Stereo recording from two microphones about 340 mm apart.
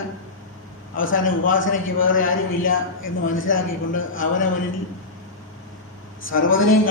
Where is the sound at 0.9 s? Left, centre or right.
Left.